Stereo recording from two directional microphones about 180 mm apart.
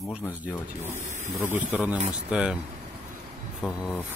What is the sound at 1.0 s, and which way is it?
Snake, 40° right (ahead or behind).